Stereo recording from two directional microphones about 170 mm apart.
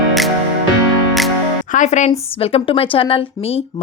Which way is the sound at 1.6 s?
45° left (ahead or behind).